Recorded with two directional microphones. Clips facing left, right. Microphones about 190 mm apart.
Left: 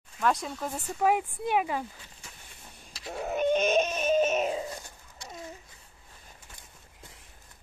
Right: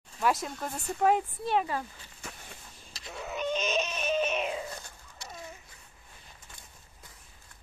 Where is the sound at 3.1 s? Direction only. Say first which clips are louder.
Left 6 dB; 50° left (ahead or behind).